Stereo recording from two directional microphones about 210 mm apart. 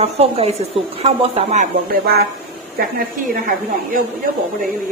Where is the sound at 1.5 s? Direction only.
40° right (ahead or behind).